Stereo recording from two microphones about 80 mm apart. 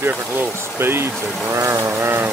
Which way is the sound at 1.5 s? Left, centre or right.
Right.